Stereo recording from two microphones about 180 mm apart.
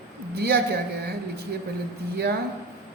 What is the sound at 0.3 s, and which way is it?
Speech, 65° right (ahead or behind).